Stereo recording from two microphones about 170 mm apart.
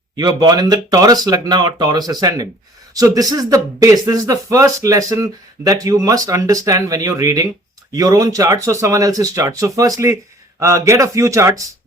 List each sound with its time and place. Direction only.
0.2 s speech: 25° right (ahead or behind)